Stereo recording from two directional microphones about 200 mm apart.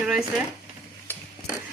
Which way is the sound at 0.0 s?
5° right (ahead or behind).